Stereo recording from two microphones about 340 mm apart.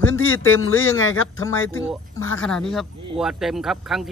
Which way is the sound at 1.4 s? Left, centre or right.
Centre.